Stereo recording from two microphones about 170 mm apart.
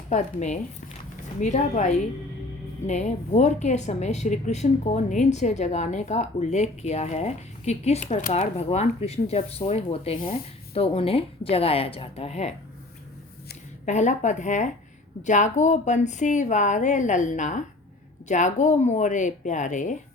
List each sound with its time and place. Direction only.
0.1 s speech: 45° left (ahead or behind)
13.8 s speech: 45° left (ahead or behind)